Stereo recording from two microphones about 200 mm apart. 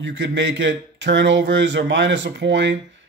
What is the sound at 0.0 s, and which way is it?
Speech, 65° right (ahead or behind).